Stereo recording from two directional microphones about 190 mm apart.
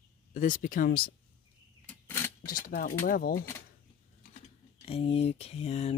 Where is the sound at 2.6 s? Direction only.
50° left (ahead or behind).